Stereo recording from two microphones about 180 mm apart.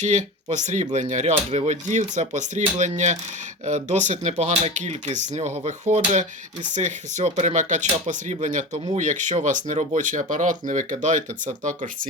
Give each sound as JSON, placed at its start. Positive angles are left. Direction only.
{"t": 0.0, "sound": "speech", "side_deg": -40}